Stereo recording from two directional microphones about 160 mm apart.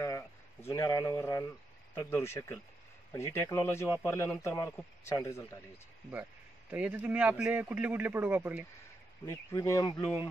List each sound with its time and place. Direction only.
0.0 s a sound: 15° left (ahead or behind)
2.0 s speech: 15° left (ahead or behind)
6.7 s a man's voice: 10° right (ahead or behind)
9.2 s speech: 20° left (ahead or behind)